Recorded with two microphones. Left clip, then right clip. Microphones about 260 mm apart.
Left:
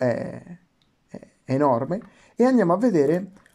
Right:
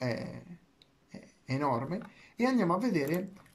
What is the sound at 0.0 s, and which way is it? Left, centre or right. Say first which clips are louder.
Speech: left 12 dB; left.